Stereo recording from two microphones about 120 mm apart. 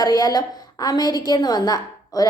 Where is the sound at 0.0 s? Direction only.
30° left (ahead or behind).